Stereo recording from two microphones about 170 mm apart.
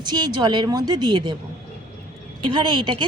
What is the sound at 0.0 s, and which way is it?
Speech, 25° right (ahead or behind).